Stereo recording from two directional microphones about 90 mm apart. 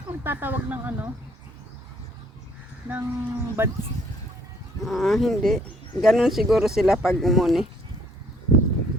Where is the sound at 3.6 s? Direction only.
25° right (ahead or behind).